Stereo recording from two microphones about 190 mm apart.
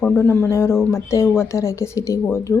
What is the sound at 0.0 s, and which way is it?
A woman's voice, 10° left (ahead or behind).